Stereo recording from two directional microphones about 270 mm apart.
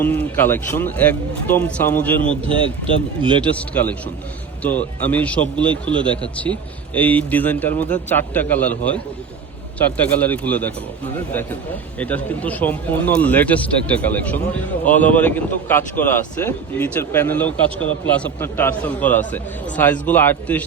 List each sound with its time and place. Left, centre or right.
0.0 s speech: centre
2.5 s speech: centre
3.4 s speech: centre
10.2 s speech: centre
11.9 s speech: centre